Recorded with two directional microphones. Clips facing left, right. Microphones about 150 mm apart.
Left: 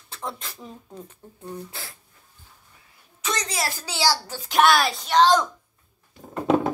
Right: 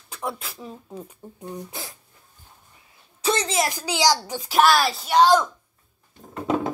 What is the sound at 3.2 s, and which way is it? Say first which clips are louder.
A woman's voice: right 5 dB; 30° right (ahead or behind).